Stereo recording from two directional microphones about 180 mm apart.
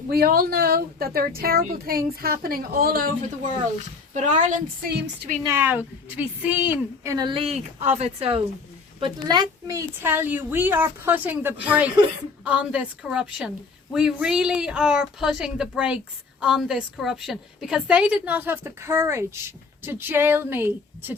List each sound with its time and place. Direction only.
0.1 s a woman's voice: 55° right (ahead or behind)
5.4 s a woman's voice: 15° right (ahead or behind)